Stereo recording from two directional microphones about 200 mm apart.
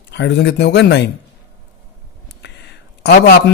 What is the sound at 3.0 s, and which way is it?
Speech, 50° left (ahead or behind).